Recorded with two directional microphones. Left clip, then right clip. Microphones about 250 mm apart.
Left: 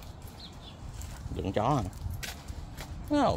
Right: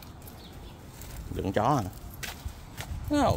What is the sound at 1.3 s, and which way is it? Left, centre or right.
Speech, centre.